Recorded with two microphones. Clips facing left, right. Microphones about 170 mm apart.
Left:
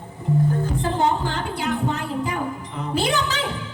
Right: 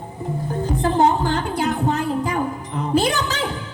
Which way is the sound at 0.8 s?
45° right (ahead or behind).